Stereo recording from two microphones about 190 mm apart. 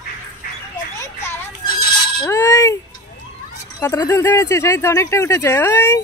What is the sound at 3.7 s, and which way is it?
Speech, 15° left (ahead or behind).